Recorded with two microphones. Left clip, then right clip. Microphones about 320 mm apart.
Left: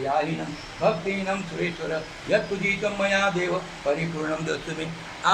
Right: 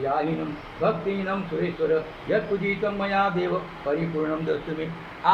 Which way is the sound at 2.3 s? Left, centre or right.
Left.